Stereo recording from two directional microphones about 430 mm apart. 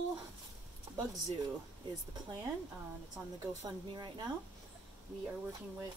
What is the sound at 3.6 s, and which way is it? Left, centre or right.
Speech, centre.